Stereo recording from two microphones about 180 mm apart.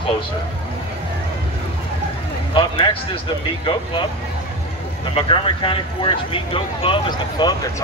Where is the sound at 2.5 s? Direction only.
30° left (ahead or behind).